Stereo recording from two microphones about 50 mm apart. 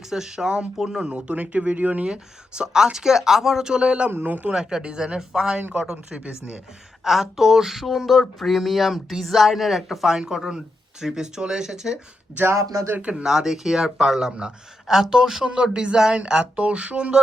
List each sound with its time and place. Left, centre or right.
0.1 s speech: centre; by 2.0 s right
2.0 s speech: centre
4.1 s a man's voice: right
4.5 s speech: centre; by 6.6 s right
7.0 s speech: centre
12.5 s speech: right
13.0 s speech: right